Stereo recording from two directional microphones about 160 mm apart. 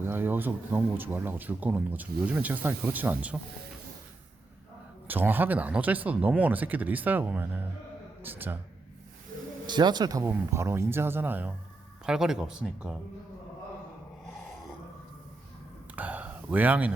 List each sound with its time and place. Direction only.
0.0 s speech: 15° right (ahead or behind)
5.0 s speech: 10° right (ahead or behind)
9.6 s speech: 25° right (ahead or behind); by 13.0 s 5° right (ahead or behind)
16.0 s a sound: 10° right (ahead or behind)